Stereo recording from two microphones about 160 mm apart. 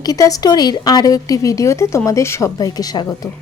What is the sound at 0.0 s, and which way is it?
A woman's voice, 20° left (ahead or behind).